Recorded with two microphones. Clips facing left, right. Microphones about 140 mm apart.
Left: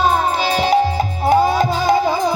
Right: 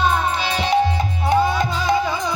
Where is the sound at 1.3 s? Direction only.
30° left (ahead or behind).